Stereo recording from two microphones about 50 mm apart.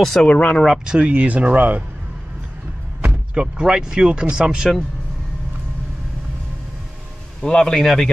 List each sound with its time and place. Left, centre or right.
0.0 s a man's voice: centre
0.3 s speech: left
0.8 s speech: right
3.3 s speech: centre
7.4 s a man's voice: centre